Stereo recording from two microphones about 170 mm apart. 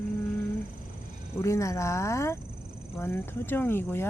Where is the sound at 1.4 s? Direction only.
15° left (ahead or behind).